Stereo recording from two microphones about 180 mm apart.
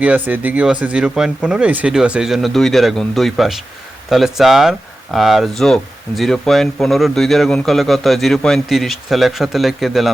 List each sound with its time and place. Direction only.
0.0 s speech: 10° right (ahead or behind)